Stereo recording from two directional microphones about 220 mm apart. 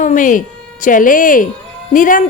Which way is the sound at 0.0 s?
35° left (ahead or behind).